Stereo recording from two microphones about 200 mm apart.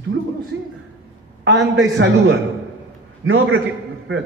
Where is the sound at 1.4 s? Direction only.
70° right (ahead or behind).